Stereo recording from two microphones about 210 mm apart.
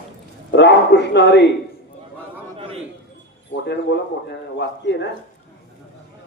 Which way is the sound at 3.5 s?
60° left (ahead or behind).